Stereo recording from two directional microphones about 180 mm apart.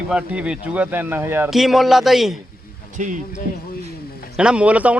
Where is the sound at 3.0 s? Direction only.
45° right (ahead or behind).